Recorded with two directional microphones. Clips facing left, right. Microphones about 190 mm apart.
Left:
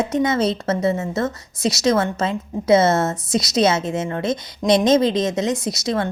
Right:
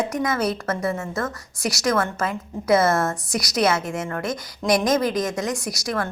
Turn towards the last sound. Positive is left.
turn(degrees=25)  # may be behind; listen again after turning